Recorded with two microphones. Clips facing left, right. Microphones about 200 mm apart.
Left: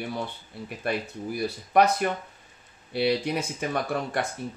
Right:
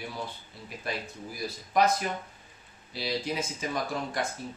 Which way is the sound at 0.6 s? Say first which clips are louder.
Left 6 dB; 65° left (ahead or behind).